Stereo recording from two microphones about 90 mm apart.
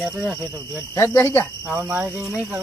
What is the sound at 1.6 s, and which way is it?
Speech, 10° right (ahead or behind).